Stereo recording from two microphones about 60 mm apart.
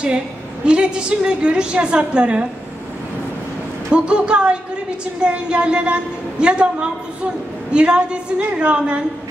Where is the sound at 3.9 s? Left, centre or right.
Centre.